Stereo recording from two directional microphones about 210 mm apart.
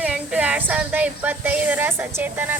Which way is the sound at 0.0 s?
5° right (ahead or behind).